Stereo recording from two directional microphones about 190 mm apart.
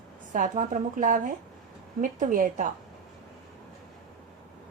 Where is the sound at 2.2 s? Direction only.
40° right (ahead or behind).